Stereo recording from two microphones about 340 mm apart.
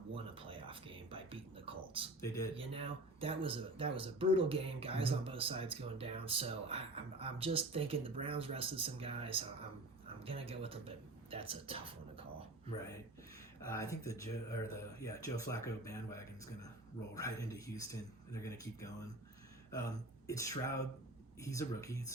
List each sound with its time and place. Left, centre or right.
0.1 s speech: centre
2.2 s speech: centre
2.6 s speech: centre
13.7 s speech: centre